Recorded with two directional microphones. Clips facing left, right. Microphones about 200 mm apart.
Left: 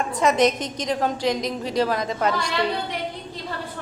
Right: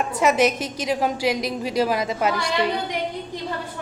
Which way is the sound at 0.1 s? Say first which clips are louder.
Even; 5° right (ahead or behind).